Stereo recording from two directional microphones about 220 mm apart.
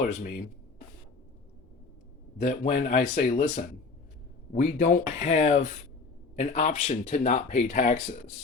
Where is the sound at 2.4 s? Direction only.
30° left (ahead or behind).